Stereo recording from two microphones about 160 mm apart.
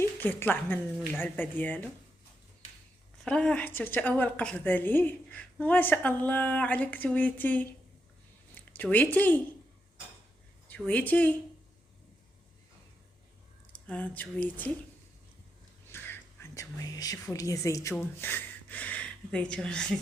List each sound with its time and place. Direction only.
0.0 s a woman's voice: 15° left (ahead or behind)
3.2 s a woman's voice: 5° left (ahead or behind)
10.7 s a woman's voice: 10° left (ahead or behind)
13.8 s a woman's voice: 10° left (ahead or behind)
15.9 s speech: 15° left (ahead or behind)